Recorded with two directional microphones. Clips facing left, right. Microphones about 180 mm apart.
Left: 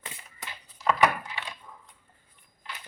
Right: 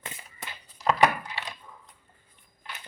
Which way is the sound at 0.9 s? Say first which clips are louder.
Right 2 dB; 40° right (ahead or behind).